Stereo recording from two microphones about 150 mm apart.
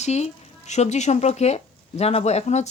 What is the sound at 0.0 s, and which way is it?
A woman's voice, 45° left (ahead or behind).